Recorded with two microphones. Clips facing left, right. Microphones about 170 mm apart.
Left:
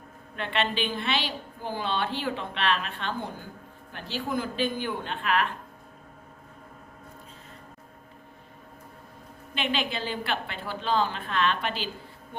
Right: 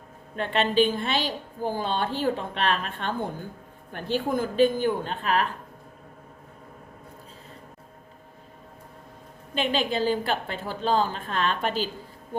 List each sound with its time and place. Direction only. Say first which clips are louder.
0.3 s a woman's voice: right 6 dB; 40° right (ahead or behind)
9.6 s a woman's voice: right 5 dB; 40° right (ahead or behind)